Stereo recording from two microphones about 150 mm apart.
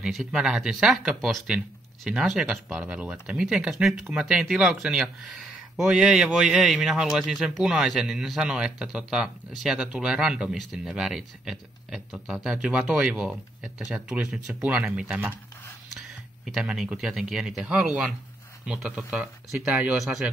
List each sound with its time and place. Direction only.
0.0 s speech: 5° right (ahead or behind)
16.4 s speech: 5° right (ahead or behind)